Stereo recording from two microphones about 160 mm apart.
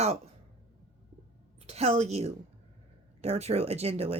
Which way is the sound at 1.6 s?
40° right (ahead or behind).